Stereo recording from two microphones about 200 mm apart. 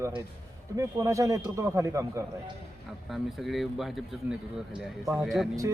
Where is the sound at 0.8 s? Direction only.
15° right (ahead or behind).